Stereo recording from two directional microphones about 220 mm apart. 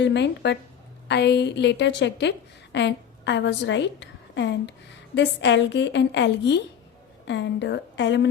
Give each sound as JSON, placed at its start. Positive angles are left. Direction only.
{"t": 0.0, "sound": "a woman's voice", "side_deg": 50}